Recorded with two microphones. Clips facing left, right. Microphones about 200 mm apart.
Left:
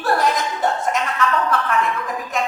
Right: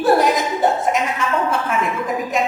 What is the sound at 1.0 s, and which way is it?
A woman's voice, 15° right (ahead or behind).